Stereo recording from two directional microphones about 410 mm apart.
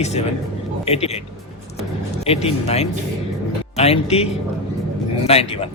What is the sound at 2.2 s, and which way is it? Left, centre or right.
Speech, centre.